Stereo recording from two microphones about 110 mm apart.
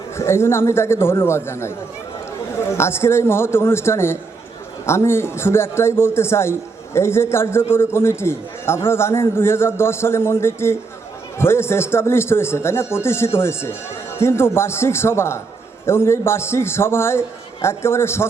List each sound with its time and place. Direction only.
0.2 s a man's voice: 25° left (ahead or behind)